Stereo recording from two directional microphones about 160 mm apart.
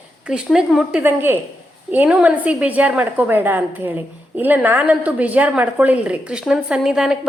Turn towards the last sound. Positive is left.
turn(degrees=-5)  # may be behind; listen again after turning